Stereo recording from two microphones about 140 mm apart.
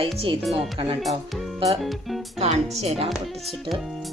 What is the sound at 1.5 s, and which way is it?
Music, 45° right (ahead or behind).